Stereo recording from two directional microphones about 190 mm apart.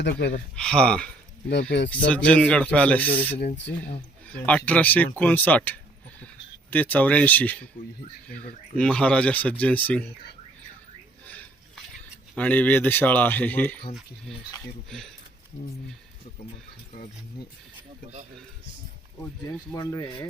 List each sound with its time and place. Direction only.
0.0 s speech: 65° left (ahead or behind)
0.5 s speech: 5° left (ahead or behind)
12.4 s speech: 10° left (ahead or behind)
14.8 s speech: centre (ahead or behind)
19.7 s speech: 15° left (ahead or behind)